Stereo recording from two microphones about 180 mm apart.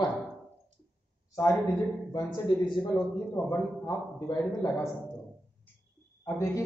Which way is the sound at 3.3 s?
15° left (ahead or behind).